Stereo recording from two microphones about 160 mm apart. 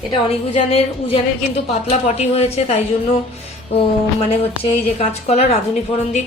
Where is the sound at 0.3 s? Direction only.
40° left (ahead or behind).